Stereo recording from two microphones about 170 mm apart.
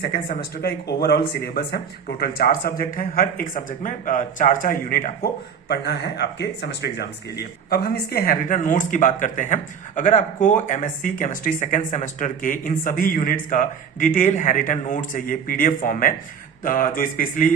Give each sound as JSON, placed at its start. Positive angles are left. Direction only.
{"t": 0.0, "sound": "speech", "side_deg": 65}